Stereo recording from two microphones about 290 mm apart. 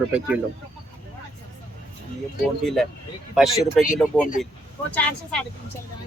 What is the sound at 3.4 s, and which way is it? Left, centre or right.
Speech, centre.